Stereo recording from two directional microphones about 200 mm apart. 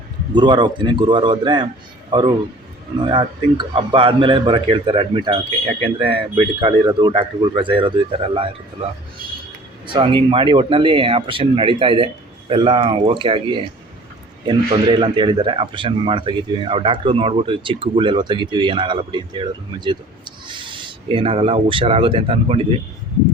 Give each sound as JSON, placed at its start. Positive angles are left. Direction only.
{"t": 0.3, "sound": "a man's voice", "side_deg": -20}
{"t": 9.8, "sound": "a man's voice", "side_deg": -25}